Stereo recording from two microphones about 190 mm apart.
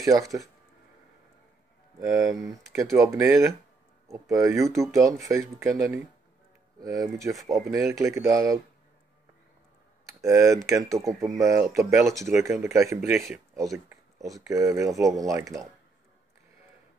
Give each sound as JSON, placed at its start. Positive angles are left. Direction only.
{"t": 0.0, "sound": "speech", "side_deg": -15}
{"t": 2.0, "sound": "speech", "side_deg": -20}
{"t": 10.2, "sound": "speech", "side_deg": -15}
{"t": 14.5, "sound": "speech", "side_deg": -15}